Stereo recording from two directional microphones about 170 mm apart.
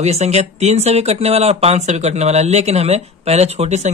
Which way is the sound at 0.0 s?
40° right (ahead or behind).